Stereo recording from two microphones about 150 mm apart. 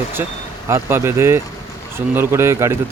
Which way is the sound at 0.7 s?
15° right (ahead or behind).